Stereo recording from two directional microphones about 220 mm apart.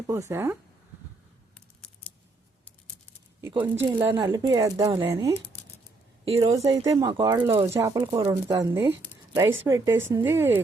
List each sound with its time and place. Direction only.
0.1 s speech: 10° right (ahead or behind)
3.6 s speech: 10° right (ahead or behind)
6.4 s speech: 15° right (ahead or behind)